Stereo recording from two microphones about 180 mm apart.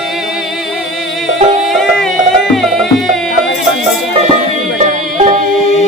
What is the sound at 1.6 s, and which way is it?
Music, centre (ahead or behind).